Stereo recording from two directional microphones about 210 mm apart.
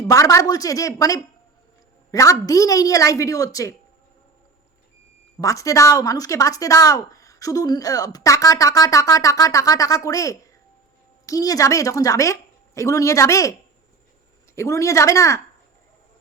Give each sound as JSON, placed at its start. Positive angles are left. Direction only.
{"t": 0.0, "sound": "speech", "side_deg": 15}
{"t": 5.4, "sound": "speech", "side_deg": 15}
{"t": 14.5, "sound": "speech", "side_deg": 15}